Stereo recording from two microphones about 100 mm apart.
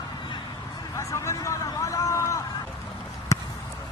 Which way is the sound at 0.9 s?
30° left (ahead or behind).